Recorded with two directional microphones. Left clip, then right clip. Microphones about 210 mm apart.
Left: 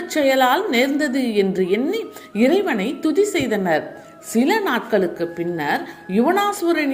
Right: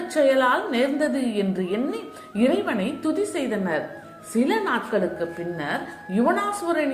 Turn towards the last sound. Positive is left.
turn(degrees=40)  # may be behind; listen again after turning